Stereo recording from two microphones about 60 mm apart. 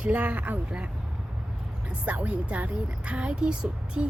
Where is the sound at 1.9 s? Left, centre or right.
Right.